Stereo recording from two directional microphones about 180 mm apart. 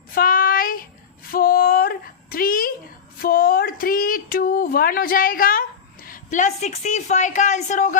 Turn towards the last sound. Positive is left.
turn(degrees=40)  # may be behind; listen again after turning